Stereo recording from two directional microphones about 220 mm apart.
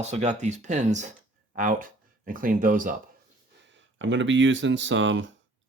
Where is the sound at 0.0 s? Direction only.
30° right (ahead or behind).